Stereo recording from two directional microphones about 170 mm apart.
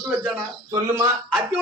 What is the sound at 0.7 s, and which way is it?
Speech, 15° right (ahead or behind).